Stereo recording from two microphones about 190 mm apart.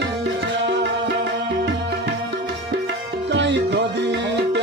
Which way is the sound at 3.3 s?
70° right (ahead or behind).